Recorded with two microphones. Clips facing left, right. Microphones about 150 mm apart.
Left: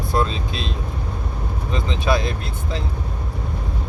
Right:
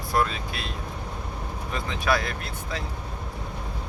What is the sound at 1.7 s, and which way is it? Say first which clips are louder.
Speech: left 4 dB; 20° left (ahead or behind).